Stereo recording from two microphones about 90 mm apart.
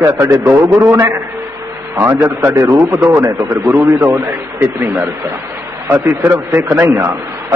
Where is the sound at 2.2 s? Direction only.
30° right (ahead or behind).